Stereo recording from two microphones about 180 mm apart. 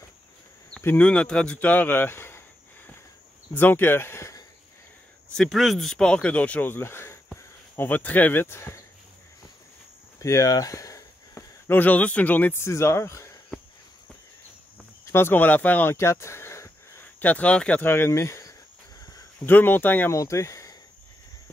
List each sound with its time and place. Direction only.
0.8 s speech: 5° left (ahead or behind)
3.5 s speech: 10° left (ahead or behind)
5.3 s speech: centre (ahead or behind)
10.1 s speech: 15° left (ahead or behind)
15.0 s speech: 15° left (ahead or behind)